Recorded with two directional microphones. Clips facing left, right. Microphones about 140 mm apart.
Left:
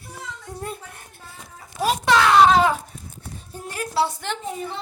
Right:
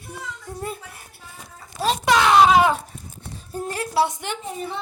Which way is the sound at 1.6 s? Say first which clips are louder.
Even; 10° left (ahead or behind).